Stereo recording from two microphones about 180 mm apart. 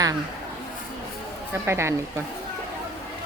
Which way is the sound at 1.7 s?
15° right (ahead or behind).